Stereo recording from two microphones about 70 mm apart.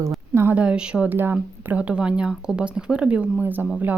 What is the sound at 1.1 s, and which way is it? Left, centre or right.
Speech, right.